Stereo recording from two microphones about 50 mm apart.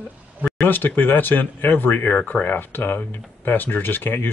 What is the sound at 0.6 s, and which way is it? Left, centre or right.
Speech, left.